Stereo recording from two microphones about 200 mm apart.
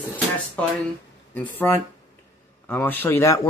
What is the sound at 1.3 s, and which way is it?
Speech, 10° left (ahead or behind).